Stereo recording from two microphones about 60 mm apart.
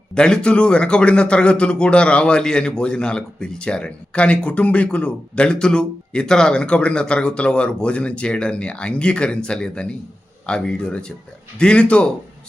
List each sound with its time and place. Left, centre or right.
0.1 s a man's voice: centre